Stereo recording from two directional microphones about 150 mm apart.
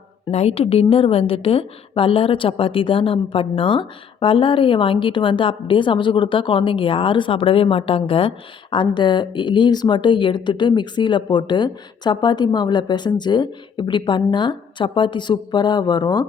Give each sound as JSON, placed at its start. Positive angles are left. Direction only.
{"t": 0.3, "sound": "a woman's voice", "side_deg": 45}